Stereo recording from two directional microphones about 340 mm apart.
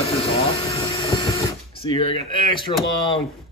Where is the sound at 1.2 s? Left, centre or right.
Centre.